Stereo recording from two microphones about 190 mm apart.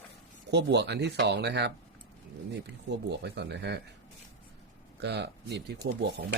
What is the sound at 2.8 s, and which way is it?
Speech, 65° right (ahead or behind).